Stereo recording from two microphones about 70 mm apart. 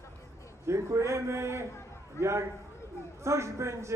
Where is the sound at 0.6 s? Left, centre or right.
Right.